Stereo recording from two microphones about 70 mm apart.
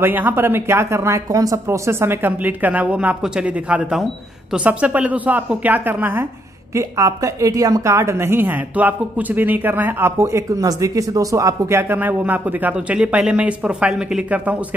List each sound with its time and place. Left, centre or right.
0.0 s speech: right
1.9 s a man's voice: right; by 3.8 s centre
3.9 s speech: centre
4.6 s a man's voice: centre
6.7 s a woman's voice: right
12.0 s a man's voice: right